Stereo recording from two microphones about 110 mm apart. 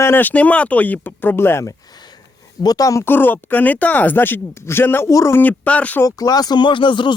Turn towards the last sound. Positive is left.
turn(degrees=45)  # may be behind; listen again after turning